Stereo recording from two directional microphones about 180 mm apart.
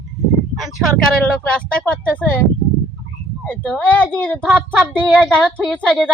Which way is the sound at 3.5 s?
5° left (ahead or behind).